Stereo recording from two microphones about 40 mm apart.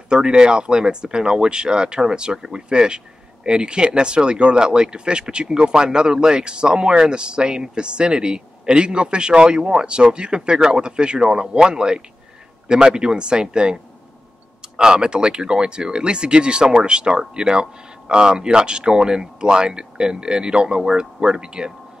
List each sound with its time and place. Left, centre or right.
0.1 s speech: right
14.8 s speech: centre